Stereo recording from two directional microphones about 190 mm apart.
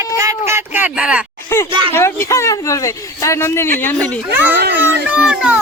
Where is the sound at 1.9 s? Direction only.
15° left (ahead or behind).